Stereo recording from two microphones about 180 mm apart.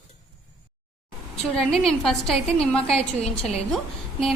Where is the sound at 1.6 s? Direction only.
Centre (ahead or behind).